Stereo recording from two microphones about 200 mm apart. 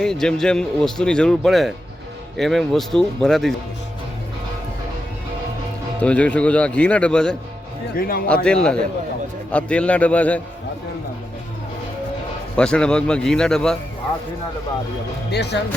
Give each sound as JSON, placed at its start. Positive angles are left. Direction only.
{"t": 0.0, "sound": "a man's voice", "side_deg": 5}
{"t": 6.0, "sound": "speech", "side_deg": 5}
{"t": 7.9, "sound": "a man's voice", "side_deg": 45}
{"t": 8.4, "sound": "a man's voice", "side_deg": 5}
{"t": 12.5, "sound": "a man's voice", "side_deg": 5}
{"t": 15.3, "sound": "speech", "side_deg": 55}